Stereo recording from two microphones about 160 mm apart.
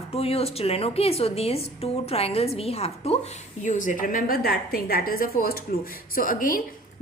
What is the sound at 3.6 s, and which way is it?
A woman's voice, 55° left (ahead or behind).